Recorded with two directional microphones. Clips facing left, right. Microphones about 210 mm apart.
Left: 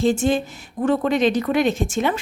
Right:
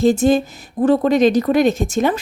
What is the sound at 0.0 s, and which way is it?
Speech, 40° right (ahead or behind).